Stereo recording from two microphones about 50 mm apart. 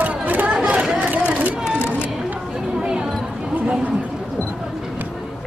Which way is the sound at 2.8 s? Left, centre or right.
Centre.